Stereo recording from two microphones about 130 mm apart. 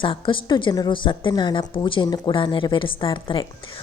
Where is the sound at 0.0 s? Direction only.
40° left (ahead or behind).